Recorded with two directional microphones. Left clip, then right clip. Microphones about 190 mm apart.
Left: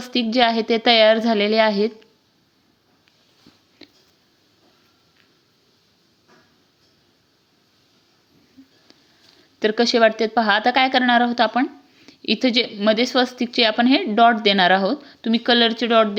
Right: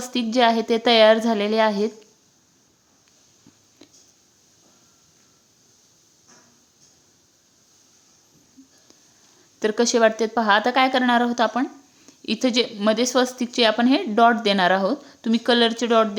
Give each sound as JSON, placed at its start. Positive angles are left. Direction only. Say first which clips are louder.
{"t": 0.0, "sound": "a woman's voice", "louder": "left 1 dB", "side_deg": 0}
{"t": 3.8, "sound": "a sound", "louder": "left 4 dB", "side_deg": 5}
{"t": 9.6, "sound": "a woman's voice", "louder": "left 2 dB", "side_deg": 5}